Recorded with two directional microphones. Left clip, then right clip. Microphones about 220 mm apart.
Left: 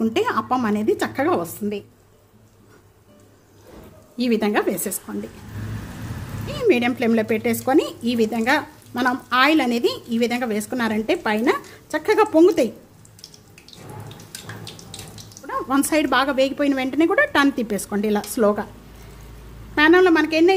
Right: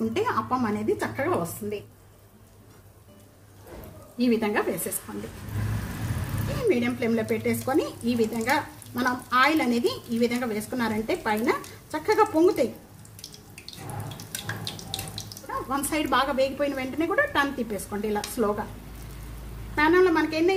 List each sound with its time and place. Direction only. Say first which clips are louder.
0.0 s speech: left 5 dB; 35° left (ahead or behind)
4.2 s a woman's voice: left 4 dB; 45° left (ahead or behind)
6.6 s speech: left 6 dB; 40° left (ahead or behind)
15.4 s speech: left 7 dB; 35° left (ahead or behind)
19.7 s speech: left 6 dB; 40° left (ahead or behind)